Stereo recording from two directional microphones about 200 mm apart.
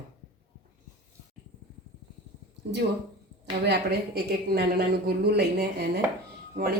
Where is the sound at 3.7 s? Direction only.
50° right (ahead or behind).